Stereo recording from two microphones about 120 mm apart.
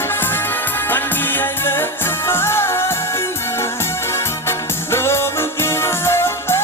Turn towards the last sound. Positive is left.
turn(degrees=20)  # may be behind; listen again after turning